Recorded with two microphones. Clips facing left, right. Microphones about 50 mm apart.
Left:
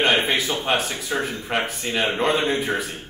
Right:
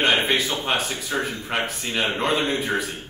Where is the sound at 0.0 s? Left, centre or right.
Centre.